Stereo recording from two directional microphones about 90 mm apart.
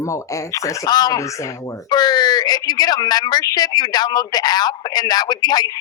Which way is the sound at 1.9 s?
50° left (ahead or behind).